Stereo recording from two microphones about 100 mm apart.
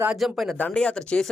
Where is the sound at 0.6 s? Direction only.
10° left (ahead or behind).